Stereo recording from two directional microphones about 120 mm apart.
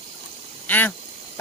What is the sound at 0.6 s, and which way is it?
Duck, 15° left (ahead or behind).